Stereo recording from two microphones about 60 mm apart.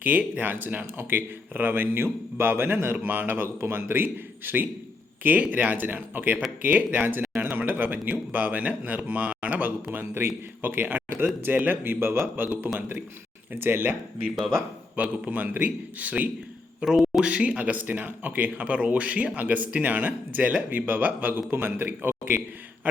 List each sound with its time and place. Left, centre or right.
0.0 s a man's voice: right
10.0 s a man's voice: right
13.6 s a man's voice: right
15.0 s speech: right
16.8 s speech: centre
17.2 s speech: right